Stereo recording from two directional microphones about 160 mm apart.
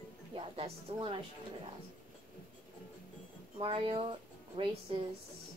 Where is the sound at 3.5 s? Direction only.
35° right (ahead or behind).